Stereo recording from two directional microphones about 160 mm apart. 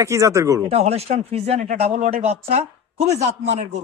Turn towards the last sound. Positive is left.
turn(degrees=-45)  # may be behind; listen again after turning